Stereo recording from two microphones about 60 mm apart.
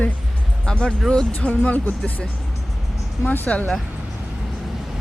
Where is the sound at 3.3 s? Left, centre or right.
Left.